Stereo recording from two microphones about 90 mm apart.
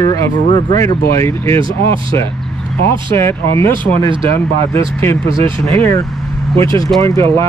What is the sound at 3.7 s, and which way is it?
Speech, 65° right (ahead or behind).